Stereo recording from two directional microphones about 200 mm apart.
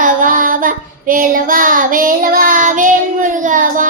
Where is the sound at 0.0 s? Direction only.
40° right (ahead or behind).